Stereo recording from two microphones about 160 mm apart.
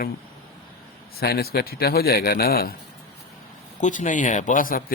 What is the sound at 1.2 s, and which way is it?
Speech, 75° left (ahead or behind).